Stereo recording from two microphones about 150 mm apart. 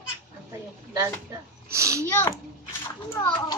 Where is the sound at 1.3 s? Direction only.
20° right (ahead or behind).